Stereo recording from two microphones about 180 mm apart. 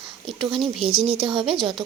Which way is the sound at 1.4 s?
Centre (ahead or behind).